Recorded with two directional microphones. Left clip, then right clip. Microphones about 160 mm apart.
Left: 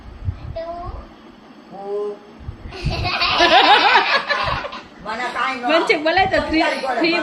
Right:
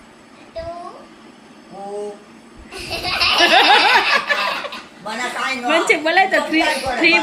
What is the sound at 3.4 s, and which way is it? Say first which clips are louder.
Snicker: even; 10° left (ahead or behind).